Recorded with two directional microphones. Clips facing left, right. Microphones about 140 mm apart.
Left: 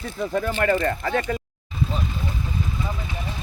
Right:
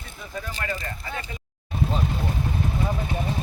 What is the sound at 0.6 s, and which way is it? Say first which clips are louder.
Speech: left 12 dB; 55° left (ahead or behind).